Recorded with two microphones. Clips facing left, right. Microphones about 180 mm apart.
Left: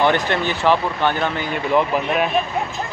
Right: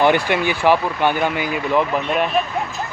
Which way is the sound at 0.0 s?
10° right (ahead or behind).